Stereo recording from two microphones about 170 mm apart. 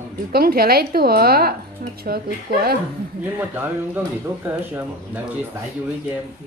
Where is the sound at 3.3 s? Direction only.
10° right (ahead or behind).